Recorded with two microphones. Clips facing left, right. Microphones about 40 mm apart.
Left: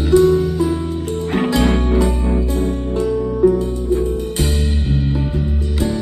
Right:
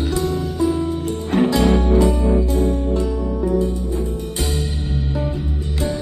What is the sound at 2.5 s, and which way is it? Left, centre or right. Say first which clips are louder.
Music: even; left.